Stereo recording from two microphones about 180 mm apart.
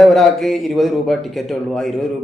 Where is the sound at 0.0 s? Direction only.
Centre (ahead or behind).